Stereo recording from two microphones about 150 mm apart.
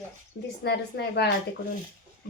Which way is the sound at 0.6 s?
90° left.